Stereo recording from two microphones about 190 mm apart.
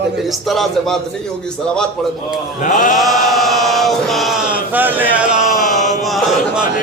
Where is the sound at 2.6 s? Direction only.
45° left (ahead or behind).